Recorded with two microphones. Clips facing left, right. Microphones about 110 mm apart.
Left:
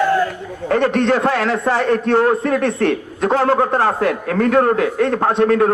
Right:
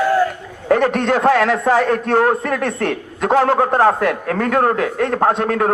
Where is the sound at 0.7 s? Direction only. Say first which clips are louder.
Left 3 dB; 45° right (ahead or behind).